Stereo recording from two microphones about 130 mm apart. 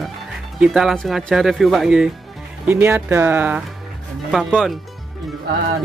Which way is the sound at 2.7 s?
15° right (ahead or behind).